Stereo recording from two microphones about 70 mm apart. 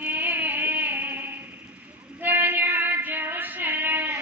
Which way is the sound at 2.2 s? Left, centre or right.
Right.